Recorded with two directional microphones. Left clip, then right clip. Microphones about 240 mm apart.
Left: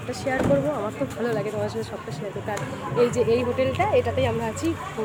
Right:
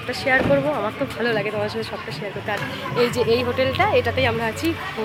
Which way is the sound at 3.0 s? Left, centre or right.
Centre.